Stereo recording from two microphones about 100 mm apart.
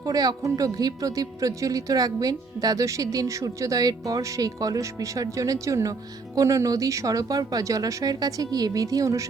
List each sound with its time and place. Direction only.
0.0 s a woman's voice: 40° right (ahead or behind)